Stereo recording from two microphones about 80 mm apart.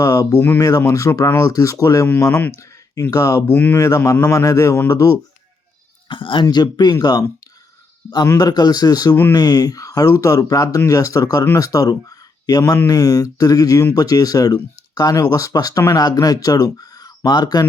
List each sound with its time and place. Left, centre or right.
0.0 s a sound: left
0.3 s speech: left
0.8 s a man's voice: left
3.1 s speech: left
3.5 s speech: left
3.8 s a man's voice: left
6.1 s speech: left
8.4 s speech: left